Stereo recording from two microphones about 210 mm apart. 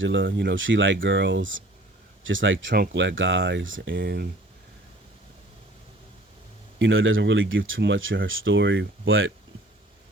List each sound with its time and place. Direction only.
0.0 s speech: 60° right (ahead or behind)
6.7 s speech: 65° right (ahead or behind)